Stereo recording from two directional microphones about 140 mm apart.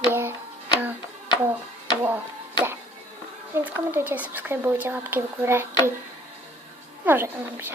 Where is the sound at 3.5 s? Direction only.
15° right (ahead or behind).